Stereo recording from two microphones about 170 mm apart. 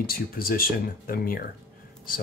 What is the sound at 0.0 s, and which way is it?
Speech, 60° left (ahead or behind).